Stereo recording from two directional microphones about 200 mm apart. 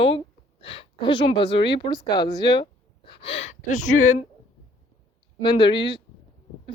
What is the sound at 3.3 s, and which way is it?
Speech, 85° left.